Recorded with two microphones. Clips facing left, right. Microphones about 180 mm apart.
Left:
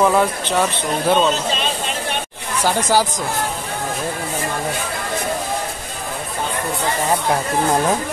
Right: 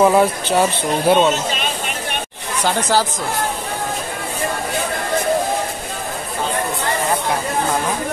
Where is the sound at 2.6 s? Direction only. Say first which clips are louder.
Left 1 dB; 15° left (ahead or behind).